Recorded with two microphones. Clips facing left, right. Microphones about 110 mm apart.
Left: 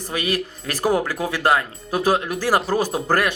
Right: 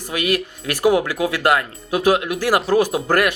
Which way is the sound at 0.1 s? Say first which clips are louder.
Right 3 dB; 30° left (ahead or behind).